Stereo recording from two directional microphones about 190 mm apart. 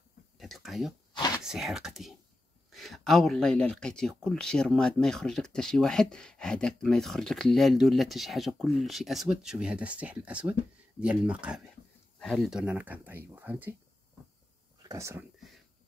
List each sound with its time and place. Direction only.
0.4 s speech: centre (ahead or behind)
14.8 s speech: 15° right (ahead or behind)